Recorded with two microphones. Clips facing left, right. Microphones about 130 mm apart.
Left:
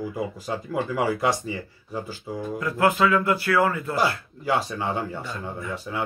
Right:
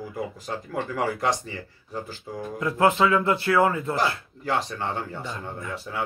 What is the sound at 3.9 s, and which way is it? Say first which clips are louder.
Speech: left 2 dB; 5° left (ahead or behind).